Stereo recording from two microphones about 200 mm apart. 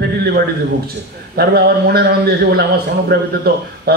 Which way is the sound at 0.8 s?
50° right (ahead or behind).